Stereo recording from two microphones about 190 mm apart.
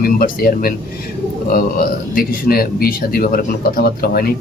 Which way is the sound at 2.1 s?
50° left (ahead or behind).